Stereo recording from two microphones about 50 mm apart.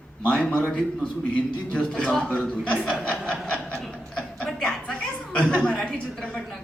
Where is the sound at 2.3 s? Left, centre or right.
Left.